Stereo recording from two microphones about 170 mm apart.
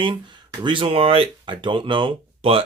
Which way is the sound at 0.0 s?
30° right (ahead or behind).